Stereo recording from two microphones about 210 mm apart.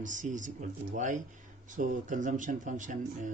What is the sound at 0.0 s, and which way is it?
A man's voice, 35° right (ahead or behind).